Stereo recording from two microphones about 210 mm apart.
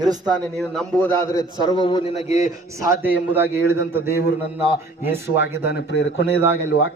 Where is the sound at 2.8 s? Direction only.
10° right (ahead or behind).